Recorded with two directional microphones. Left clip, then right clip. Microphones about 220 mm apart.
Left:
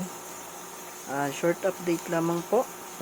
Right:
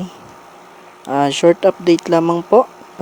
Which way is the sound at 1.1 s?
35° right (ahead or behind).